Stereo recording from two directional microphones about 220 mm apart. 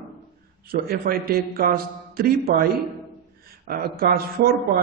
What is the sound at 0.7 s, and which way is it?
A man's voice, 40° right (ahead or behind).